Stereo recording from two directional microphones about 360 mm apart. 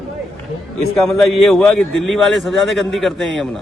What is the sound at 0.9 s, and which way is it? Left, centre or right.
A man's voice, centre.